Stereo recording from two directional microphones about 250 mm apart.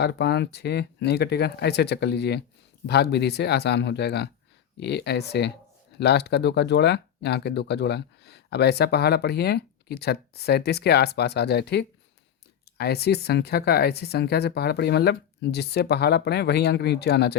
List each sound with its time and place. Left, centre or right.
0.0 s speech: left